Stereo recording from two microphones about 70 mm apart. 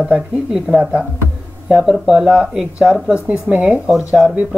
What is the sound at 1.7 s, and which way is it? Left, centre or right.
Speech, centre.